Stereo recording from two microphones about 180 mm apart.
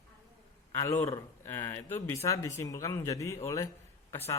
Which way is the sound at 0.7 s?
15° left (ahead or behind).